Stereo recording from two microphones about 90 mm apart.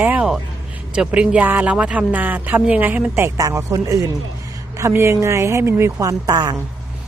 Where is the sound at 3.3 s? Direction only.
40° right (ahead or behind).